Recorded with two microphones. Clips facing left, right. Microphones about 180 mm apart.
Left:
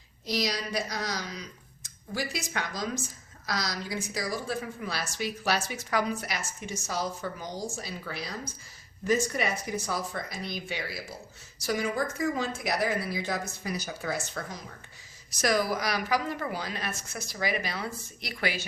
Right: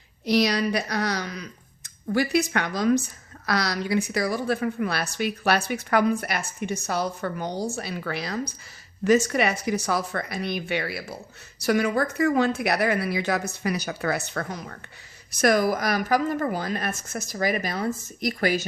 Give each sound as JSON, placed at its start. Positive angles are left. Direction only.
{"t": 0.3, "sound": "a woman's voice", "side_deg": -65}